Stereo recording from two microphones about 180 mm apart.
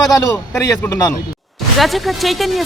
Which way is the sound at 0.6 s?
20° left (ahead or behind).